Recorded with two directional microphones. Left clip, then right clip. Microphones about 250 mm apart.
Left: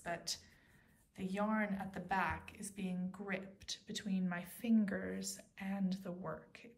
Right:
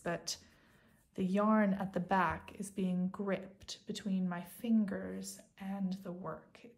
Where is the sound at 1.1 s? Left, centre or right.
Centre.